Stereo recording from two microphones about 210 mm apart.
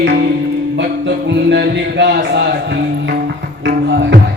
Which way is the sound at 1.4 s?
55° right (ahead or behind).